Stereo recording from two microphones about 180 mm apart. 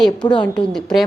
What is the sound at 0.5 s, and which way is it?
Speech, centre (ahead or behind).